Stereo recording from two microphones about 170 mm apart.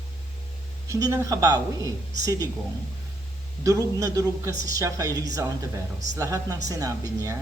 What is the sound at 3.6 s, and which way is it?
Speech, 20° right (ahead or behind).